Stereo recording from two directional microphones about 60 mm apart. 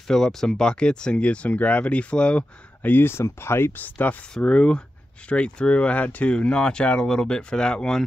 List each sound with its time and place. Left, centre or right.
0.1 s speech: centre
2.8 s speech: left
3.7 s speech: left